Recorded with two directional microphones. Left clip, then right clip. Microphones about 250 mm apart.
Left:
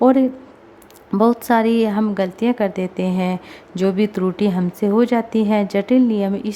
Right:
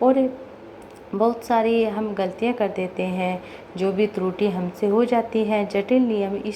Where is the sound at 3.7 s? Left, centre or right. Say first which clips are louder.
Left 3 dB; left.